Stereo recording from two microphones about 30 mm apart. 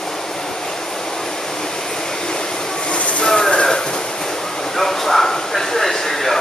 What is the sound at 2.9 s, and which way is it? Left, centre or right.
Vehicle, left.